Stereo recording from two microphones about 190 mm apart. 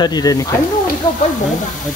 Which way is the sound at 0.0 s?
20° left (ahead or behind).